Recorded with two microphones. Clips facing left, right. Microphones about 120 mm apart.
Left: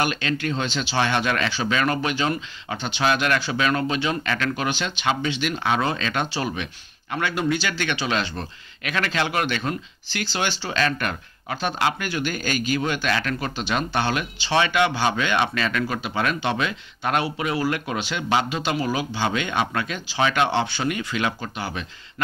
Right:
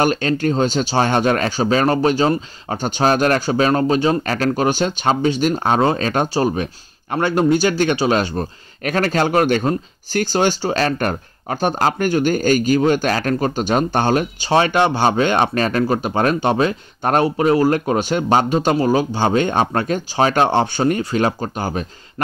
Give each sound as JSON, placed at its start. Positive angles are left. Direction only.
{"t": 0.0, "sound": "speech", "side_deg": -40}